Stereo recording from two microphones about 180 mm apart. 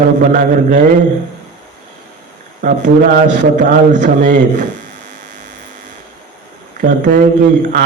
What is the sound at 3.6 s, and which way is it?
Speech, 45° right (ahead or behind).